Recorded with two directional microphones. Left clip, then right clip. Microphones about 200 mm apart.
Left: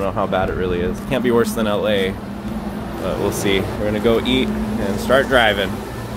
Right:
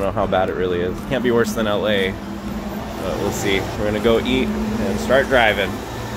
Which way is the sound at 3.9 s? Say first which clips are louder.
Even; 5° right (ahead or behind).